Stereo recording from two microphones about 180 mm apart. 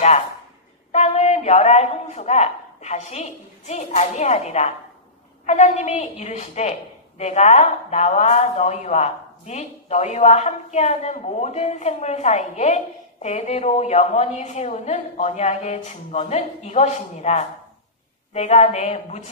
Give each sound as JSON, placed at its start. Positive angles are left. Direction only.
{"t": 0.9, "sound": "a man's voice", "side_deg": 40}